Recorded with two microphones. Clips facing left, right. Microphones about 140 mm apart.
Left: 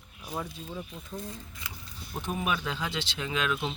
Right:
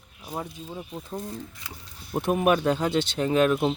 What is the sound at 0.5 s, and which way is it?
Speech, 25° right (ahead or behind).